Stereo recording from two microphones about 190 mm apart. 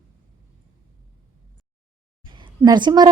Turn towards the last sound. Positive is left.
turn(degrees=-20)  # may be behind; listen again after turning